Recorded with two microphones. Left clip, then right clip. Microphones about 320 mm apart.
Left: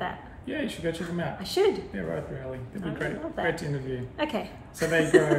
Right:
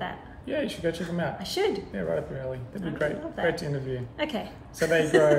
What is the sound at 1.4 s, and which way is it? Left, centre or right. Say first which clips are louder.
Speech: left 4 dB; centre.